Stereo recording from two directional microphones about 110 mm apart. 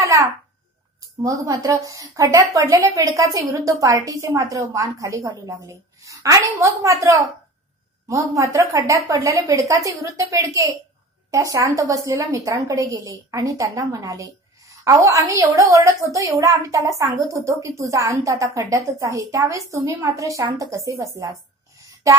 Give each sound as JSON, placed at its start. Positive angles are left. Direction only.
{"t": 0.0, "sound": "babbling", "side_deg": -30}
{"t": 1.2, "sound": "a woman's voice", "side_deg": -30}